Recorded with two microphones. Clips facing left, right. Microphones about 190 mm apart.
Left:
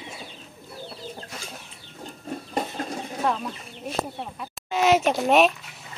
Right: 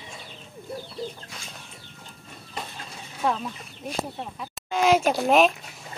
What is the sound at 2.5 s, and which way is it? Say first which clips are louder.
Chicken: left 9 dB; 45° left (ahead or behind).